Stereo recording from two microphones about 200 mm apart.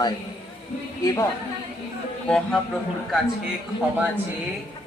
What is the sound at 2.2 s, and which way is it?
Speech, 5° left (ahead or behind).